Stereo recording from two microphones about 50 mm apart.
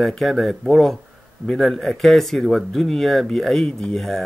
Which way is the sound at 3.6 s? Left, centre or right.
Centre.